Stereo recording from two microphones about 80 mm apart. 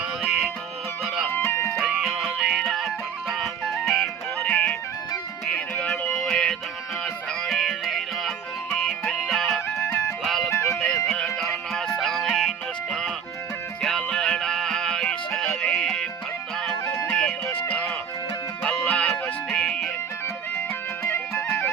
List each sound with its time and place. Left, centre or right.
0.2 s music: centre
1.3 s music: left
1.8 s music: centre
4.4 s music: centre
10.5 s music: left
10.8 s music: centre
17.1 s music: centre
21.0 s music: left